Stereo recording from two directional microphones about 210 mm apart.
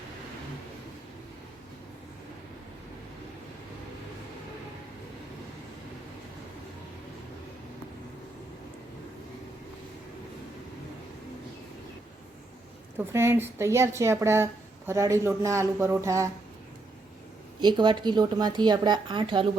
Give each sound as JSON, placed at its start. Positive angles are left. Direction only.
{"t": 13.0, "sound": "a woman's voice", "side_deg": -10}
{"t": 17.6, "sound": "speech", "side_deg": -20}